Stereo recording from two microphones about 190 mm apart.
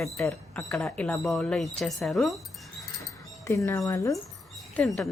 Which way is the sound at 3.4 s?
15° left (ahead or behind).